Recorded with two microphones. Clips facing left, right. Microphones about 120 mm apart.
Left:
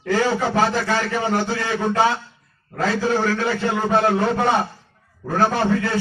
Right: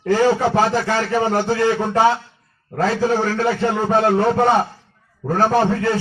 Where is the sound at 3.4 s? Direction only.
35° right (ahead or behind).